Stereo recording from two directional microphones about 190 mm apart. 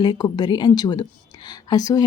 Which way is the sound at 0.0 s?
20° left (ahead or behind).